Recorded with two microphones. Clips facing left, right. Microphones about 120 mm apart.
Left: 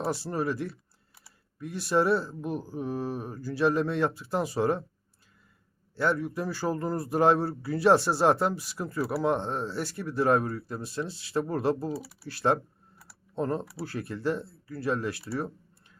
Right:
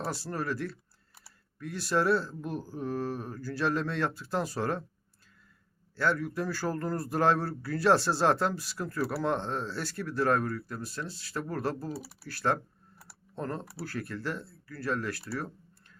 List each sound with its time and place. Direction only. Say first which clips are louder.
0.0 s speech: left 5 dB; 20° left (ahead or behind)
6.0 s speech: left 2 dB; 20° left (ahead or behind)